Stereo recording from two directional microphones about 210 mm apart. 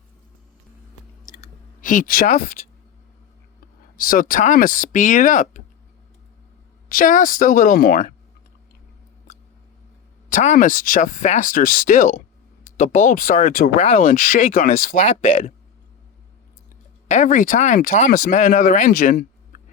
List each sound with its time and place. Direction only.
1.4 s clicking: 40° left (ahead or behind)
3.9 s speech: 40° left (ahead or behind)
6.8 s speech: 40° left (ahead or behind)
9.3 s a sound: 35° left (ahead or behind)
10.2 s speech: 35° left (ahead or behind)
17.1 s speech: 35° left (ahead or behind)